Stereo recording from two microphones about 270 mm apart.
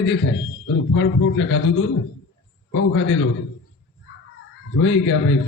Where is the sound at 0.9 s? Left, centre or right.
Left.